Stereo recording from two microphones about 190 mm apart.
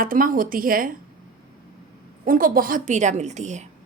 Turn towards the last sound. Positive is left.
turn(degrees=-40)  # may be behind; listen again after turning